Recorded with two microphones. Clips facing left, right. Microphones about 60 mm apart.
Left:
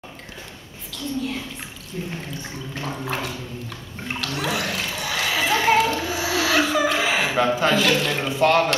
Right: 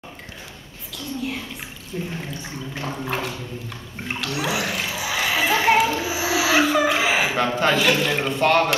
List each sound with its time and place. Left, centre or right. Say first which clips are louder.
0.9 s a woman's voice: left 1 dB; centre
1.9 s a woman's voice: right 2 dB; centre
2.4 s water: right 1 dB; centre